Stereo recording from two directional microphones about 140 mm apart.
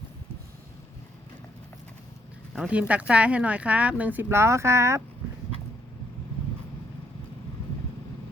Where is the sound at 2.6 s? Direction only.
10° right (ahead or behind).